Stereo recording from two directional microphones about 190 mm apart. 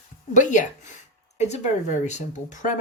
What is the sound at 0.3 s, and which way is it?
Speech, 40° left (ahead or behind).